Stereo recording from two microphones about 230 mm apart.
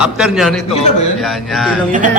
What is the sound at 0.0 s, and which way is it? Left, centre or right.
Speech, centre.